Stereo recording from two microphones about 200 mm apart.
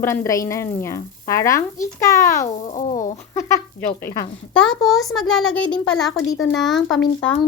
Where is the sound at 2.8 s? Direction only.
35° left (ahead or behind).